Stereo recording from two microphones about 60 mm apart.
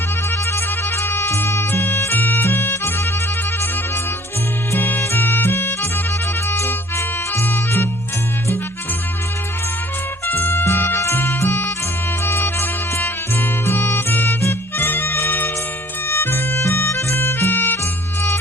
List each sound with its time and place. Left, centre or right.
0.3 s music: left
4.7 s music: left
10.2 s music: left